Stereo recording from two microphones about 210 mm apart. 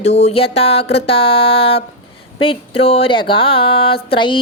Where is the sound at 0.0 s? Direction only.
30° left (ahead or behind).